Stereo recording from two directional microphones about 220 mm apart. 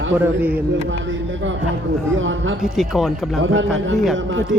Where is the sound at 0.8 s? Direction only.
60° right (ahead or behind).